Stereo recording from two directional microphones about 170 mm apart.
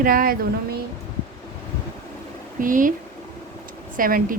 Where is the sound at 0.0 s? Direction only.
55° right (ahead or behind).